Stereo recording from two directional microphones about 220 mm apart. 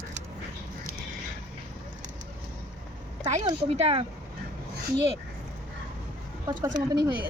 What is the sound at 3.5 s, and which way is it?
Speech, 30° right (ahead or behind).